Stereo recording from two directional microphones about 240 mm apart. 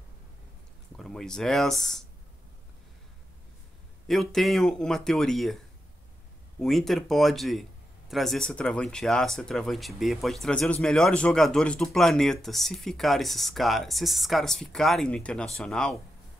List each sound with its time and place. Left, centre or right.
0.9 s speech: centre
4.1 s speech: centre
6.6 s speech: centre